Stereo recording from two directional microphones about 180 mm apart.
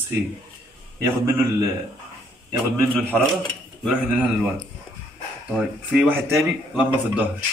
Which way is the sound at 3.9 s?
10° right (ahead or behind).